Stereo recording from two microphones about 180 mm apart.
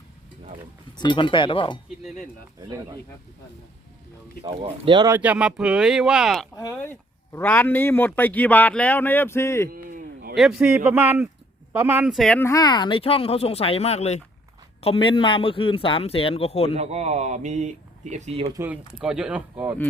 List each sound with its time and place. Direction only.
0.9 s speech: 25° left (ahead or behind)
4.4 s speech: 30° right (ahead or behind)
5.0 s speech: 10° right (ahead or behind)
6.6 s a man's voice: 15° left (ahead or behind)
9.6 s a sound: 55° right (ahead or behind)
10.3 s a man's voice: centre (ahead or behind); by 16.7 s 35° left (ahead or behind)
16.7 s speech: 35° right (ahead or behind)
18.5 s speech: 15° right (ahead or behind)